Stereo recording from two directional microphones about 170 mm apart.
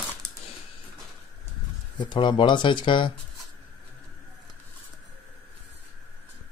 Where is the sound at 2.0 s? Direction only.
25° left (ahead or behind).